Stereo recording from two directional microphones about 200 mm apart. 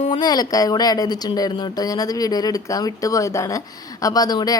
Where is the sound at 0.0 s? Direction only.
25° left (ahead or behind).